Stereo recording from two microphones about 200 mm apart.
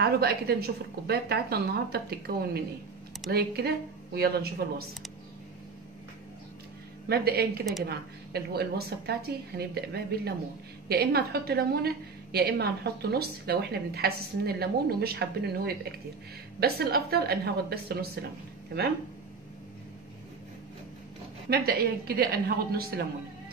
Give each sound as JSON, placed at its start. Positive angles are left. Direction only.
{"t": 0.0, "sound": "a woman's voice", "side_deg": -55}
{"t": 7.1, "sound": "a woman's voice", "side_deg": -50}
{"t": 21.5, "sound": "a woman's voice", "side_deg": -50}